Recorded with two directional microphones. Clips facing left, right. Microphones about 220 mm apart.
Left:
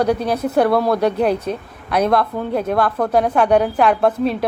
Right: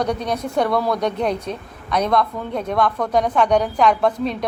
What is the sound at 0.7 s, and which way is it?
Speech, 30° left (ahead or behind).